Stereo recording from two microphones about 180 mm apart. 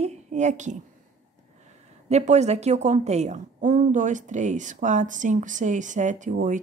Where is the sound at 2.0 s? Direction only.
40° right (ahead or behind).